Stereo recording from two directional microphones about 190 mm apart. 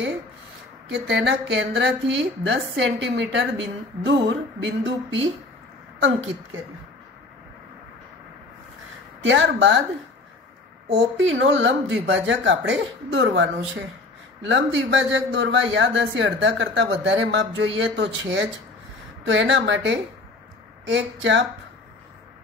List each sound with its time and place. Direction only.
0.8 s a woman's voice: 65° right (ahead or behind)
9.2 s a woman's voice: 75° right (ahead or behind)
10.9 s a woman's voice: 80° right
17.7 s a woman's voice: 70° right (ahead or behind)